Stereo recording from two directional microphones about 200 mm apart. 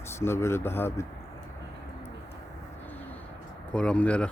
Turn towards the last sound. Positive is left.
turn(degrees=5)  # may be behind; listen again after turning